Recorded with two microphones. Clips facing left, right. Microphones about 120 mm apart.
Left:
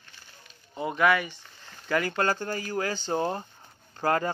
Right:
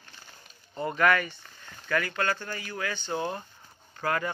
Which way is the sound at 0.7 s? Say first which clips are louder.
Left 1 dB; 5° left (ahead or behind).